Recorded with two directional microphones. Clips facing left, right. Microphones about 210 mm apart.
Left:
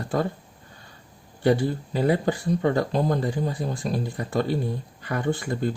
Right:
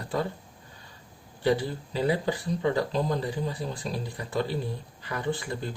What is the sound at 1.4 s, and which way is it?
Speech, 50° left (ahead or behind).